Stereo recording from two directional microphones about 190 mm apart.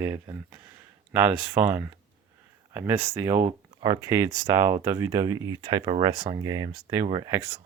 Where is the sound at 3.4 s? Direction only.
25° right (ahead or behind).